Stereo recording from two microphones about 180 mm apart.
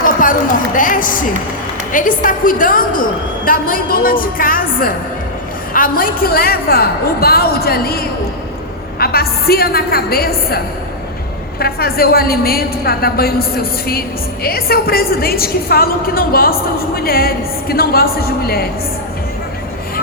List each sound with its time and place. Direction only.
0.8 s a woman's voice: 50° left (ahead or behind)
11.6 s a woman's voice: 55° left (ahead or behind)